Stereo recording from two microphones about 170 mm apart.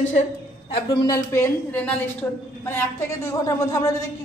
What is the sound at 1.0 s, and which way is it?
A man's voice, 15° left (ahead or behind).